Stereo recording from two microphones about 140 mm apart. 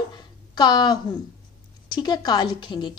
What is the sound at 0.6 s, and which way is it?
Speech, 30° left (ahead or behind).